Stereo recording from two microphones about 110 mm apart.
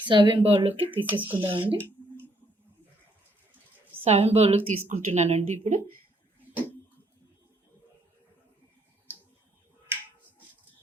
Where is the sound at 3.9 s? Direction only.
70° right (ahead or behind); by 5.7 s 90° right.